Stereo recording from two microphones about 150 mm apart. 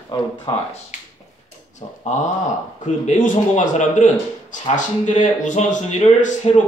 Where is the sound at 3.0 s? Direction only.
60° left (ahead or behind).